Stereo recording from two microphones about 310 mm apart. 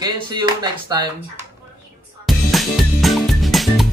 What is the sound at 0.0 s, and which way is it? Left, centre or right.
Speech, centre.